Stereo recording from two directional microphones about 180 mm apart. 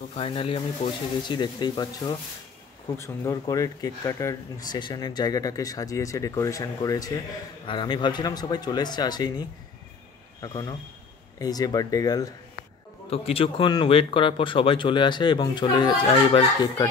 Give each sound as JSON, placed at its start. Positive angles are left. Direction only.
{"t": 0.1, "sound": "speech", "side_deg": 30}
{"t": 13.1, "sound": "speech", "side_deg": 35}